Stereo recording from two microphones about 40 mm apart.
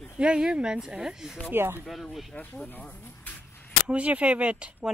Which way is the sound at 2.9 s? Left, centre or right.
Left.